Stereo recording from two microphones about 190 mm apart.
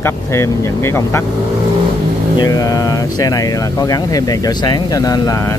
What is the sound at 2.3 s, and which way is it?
Speech, 20° left (ahead or behind).